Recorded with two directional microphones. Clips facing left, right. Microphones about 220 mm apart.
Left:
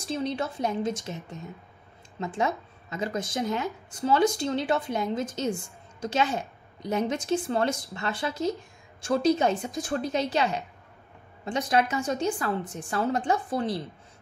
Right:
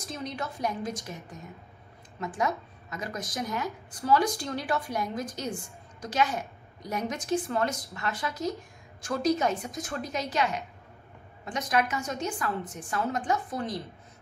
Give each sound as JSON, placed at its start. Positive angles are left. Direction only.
{"t": 0.0, "sound": "a woman's voice", "side_deg": 30}